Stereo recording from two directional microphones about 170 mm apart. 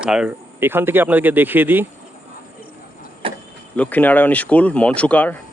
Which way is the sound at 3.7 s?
10° left (ahead or behind).